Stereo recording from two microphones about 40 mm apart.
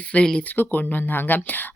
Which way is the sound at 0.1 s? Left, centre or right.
Left.